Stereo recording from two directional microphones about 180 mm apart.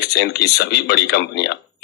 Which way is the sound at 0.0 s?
65° left (ahead or behind).